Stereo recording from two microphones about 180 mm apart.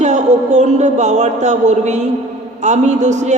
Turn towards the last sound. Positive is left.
turn(degrees=-40)  # may be behind; listen again after turning